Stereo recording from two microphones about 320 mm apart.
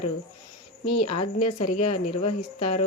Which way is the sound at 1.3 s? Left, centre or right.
Centre.